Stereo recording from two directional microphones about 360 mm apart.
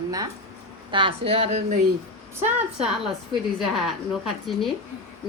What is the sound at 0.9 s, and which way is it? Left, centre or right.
Speech, centre.